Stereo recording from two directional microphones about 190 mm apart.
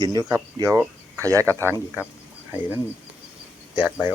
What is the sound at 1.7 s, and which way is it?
Speech, 10° left (ahead or behind).